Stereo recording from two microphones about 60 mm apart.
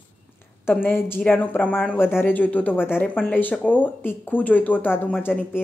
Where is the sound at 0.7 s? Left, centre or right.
Left.